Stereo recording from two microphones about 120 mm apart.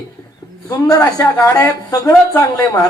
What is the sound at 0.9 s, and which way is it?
Speech, 30° left (ahead or behind).